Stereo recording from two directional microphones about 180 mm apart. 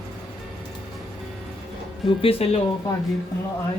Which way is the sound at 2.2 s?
30° left (ahead or behind).